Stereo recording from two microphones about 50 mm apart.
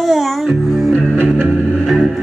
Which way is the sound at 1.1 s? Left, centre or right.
Right.